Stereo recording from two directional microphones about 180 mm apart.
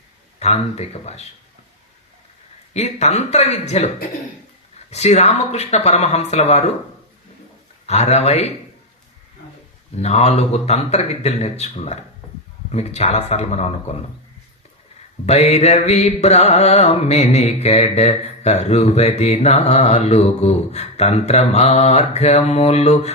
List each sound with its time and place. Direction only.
0.3 s mantra: 35° left (ahead or behind)
2.7 s mantra: 40° left (ahead or behind)
7.9 s mantra: 40° left (ahead or behind)
10.0 s mantra: 35° left (ahead or behind)
15.3 s mantra: 35° left (ahead or behind)